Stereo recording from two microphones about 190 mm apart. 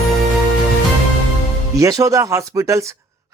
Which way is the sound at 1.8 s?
15° right (ahead or behind).